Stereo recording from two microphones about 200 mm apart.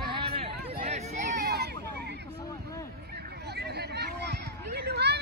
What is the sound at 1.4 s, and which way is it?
Hubbub, 50° right (ahead or behind).